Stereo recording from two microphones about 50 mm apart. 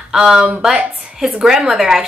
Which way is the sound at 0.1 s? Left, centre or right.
Centre.